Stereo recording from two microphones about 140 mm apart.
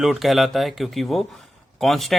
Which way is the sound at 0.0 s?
Centre (ahead or behind).